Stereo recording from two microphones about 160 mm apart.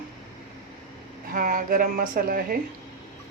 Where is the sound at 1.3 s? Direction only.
60° right (ahead or behind).